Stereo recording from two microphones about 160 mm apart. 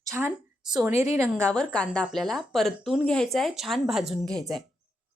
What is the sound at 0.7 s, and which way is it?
Speech, 10° right (ahead or behind).